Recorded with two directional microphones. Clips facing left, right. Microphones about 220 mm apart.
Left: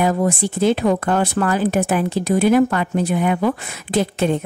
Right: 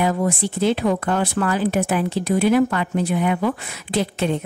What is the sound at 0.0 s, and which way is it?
Speech, 45° left (ahead or behind).